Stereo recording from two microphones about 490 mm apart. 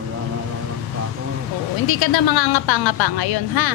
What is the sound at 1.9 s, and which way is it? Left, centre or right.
Speech, left.